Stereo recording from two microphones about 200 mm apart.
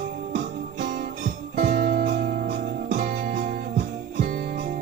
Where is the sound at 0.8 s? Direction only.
40° right (ahead or behind).